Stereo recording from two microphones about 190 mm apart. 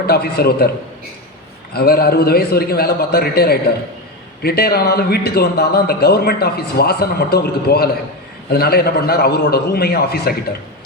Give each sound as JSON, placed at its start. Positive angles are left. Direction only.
{"t": 0.0, "sound": "a man's voice", "side_deg": 55}
{"t": 1.7, "sound": "a man's voice", "side_deg": 55}